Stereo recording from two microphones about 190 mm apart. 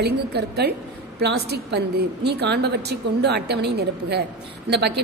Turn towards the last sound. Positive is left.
turn(degrees=-60)  # may be behind; listen again after turning